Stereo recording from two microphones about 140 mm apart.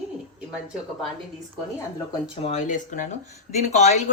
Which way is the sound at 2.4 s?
60° left (ahead or behind).